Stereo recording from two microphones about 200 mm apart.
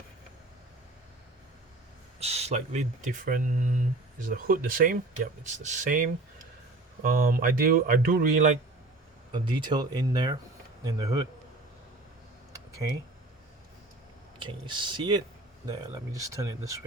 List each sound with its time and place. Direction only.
2.1 s speech: 30° right (ahead or behind)
9.3 s speech: 25° right (ahead or behind)
14.3 s speech: 25° right (ahead or behind)